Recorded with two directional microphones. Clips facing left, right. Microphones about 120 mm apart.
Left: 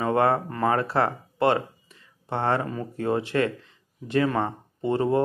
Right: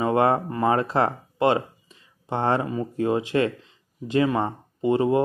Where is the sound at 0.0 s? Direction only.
20° right (ahead or behind).